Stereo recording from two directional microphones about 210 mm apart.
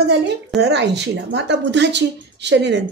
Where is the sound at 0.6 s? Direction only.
55° right (ahead or behind).